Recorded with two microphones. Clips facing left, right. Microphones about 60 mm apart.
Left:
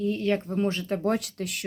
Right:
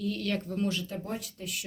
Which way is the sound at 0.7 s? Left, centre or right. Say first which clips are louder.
Left 6 dB; left.